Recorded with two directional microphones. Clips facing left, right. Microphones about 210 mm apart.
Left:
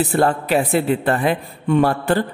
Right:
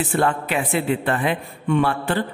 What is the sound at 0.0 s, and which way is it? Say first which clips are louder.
A man's voice: left 3 dB; 40° left (ahead or behind).